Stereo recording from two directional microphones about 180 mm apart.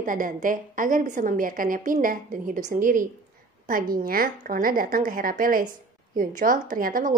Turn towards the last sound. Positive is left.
turn(degrees=-50)  # may be behind; listen again after turning